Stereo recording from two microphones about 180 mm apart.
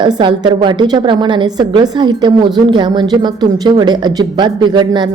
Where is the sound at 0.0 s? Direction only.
25° right (ahead or behind).